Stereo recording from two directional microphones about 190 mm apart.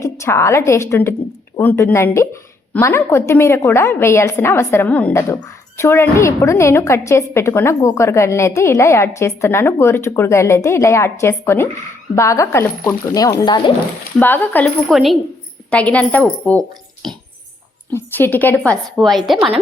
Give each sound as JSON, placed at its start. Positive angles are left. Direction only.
{"t": 0.0, "sound": "a woman's voice", "side_deg": 15}
{"t": 14.2, "sound": "a woman's voice", "side_deg": 10}
{"t": 17.9, "sound": "a woman's voice", "side_deg": 10}